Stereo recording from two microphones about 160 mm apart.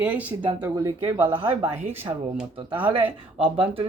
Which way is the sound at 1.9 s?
15° right (ahead or behind).